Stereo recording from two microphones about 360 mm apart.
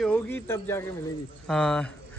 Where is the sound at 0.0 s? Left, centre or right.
Centre.